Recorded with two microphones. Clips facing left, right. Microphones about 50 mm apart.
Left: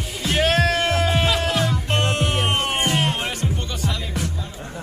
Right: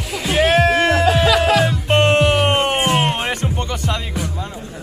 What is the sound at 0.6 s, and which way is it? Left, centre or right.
Music, right.